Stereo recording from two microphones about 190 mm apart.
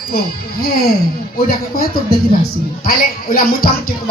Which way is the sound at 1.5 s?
50° left (ahead or behind).